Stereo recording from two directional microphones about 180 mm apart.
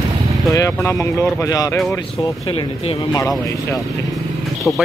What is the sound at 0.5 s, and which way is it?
Speech, 15° left (ahead or behind).